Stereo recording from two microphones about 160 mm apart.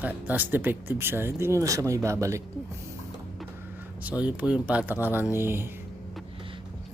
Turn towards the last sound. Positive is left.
turn(degrees=-15)  # may be behind; listen again after turning